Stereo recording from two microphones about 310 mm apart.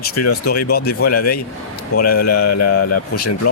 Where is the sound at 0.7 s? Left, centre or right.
Left.